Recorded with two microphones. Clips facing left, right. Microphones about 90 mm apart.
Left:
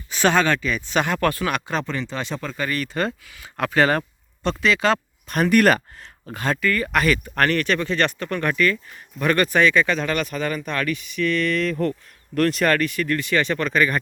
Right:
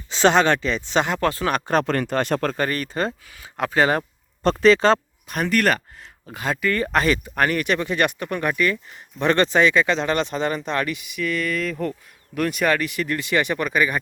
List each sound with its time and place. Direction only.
0.1 s speech: 20° right (ahead or behind)
1.7 s speech: 55° right (ahead or behind)
2.6 s speech: 35° right (ahead or behind); by 4.0 s 20° right (ahead or behind)
4.6 s speech: 35° right (ahead or behind)
5.3 s speech: 5° right (ahead or behind)
6.3 s speech: 10° right (ahead or behind)
6.6 s speech: 25° right (ahead or behind)
7.3 s speech: 10° right (ahead or behind)